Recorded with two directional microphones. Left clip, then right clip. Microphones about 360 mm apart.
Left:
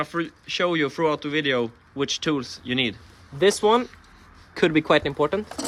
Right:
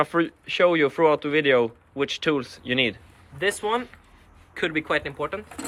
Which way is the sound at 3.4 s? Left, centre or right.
Centre.